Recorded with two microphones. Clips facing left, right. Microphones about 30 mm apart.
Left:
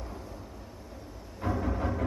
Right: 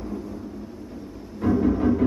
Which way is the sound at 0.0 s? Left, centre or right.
Centre.